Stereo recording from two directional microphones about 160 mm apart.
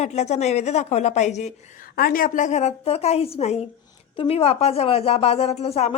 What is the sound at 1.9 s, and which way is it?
A woman's voice, 65° left (ahead or behind).